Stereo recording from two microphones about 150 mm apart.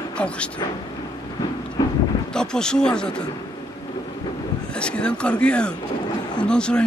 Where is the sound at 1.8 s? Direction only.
25° left (ahead or behind).